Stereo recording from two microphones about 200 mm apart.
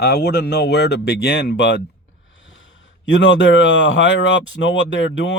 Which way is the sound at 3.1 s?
65° left (ahead or behind).